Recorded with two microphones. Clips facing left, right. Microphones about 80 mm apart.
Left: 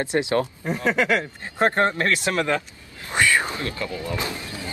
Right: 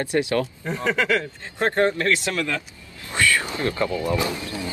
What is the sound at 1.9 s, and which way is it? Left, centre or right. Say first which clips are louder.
Speech: even; left.